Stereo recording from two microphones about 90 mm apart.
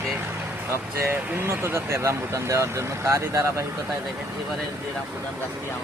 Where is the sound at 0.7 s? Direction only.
25° right (ahead or behind).